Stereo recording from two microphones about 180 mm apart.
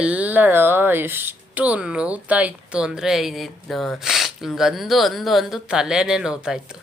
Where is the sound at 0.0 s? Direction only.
10° right (ahead or behind).